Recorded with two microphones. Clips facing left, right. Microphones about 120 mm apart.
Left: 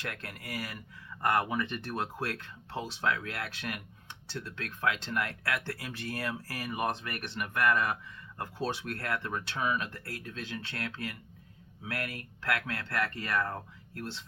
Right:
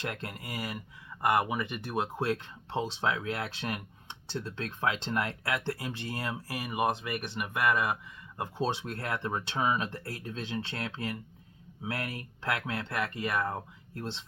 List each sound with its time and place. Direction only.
0.0 s speech: 25° right (ahead or behind)
2.1 s speech: 25° right (ahead or behind)